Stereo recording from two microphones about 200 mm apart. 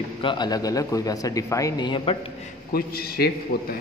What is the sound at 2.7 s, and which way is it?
A man's voice, 50° left (ahead or behind).